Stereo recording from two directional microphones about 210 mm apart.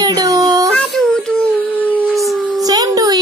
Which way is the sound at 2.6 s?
15° right (ahead or behind).